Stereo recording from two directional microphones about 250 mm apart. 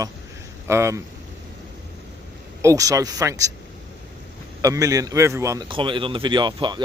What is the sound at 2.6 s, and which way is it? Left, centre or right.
Speech, centre.